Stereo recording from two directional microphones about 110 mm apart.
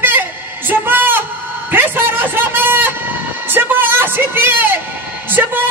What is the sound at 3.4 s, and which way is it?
Music, 15° right (ahead or behind).